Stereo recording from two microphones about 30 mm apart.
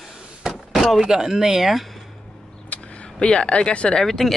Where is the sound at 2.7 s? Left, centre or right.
Left.